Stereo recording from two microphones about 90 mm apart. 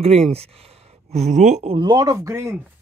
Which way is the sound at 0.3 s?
90° right.